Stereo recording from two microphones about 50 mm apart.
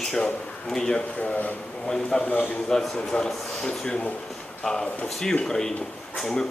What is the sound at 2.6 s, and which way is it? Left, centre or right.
A man's voice, centre.